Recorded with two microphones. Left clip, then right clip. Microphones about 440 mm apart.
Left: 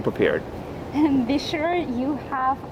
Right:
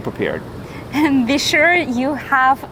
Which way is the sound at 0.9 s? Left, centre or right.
Right.